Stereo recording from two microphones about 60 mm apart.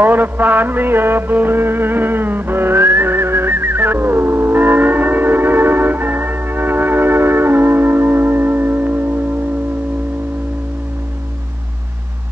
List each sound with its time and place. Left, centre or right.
0.0 s music: right